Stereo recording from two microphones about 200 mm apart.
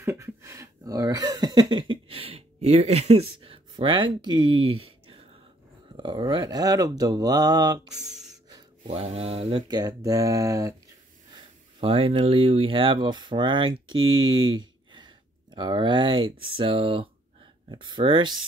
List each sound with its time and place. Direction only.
0.0 s speech: 15° right (ahead or behind)
4.8 s a sound: 25° right (ahead or behind)
5.9 s speech: 25° right (ahead or behind)
8.0 s music: centre (ahead or behind)
8.8 s speech: 30° right (ahead or behind); by 10.8 s 15° right (ahead or behind)
11.8 s speech: 30° right (ahead or behind)
14.6 s a sound: 20° right (ahead or behind)
16.4 s speech: 25° right (ahead or behind)